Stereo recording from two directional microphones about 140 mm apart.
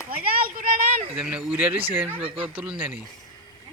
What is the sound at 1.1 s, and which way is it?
Speech, 10° right (ahead or behind).